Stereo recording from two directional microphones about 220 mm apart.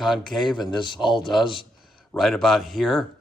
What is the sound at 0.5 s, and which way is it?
Speech, 20° left (ahead or behind).